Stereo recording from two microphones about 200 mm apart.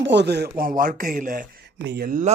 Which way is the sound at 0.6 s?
45° right (ahead or behind).